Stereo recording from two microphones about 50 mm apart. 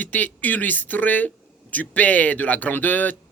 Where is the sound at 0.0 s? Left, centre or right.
Left.